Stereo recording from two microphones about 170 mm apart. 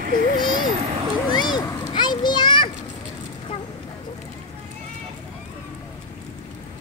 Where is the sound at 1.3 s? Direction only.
25° left (ahead or behind).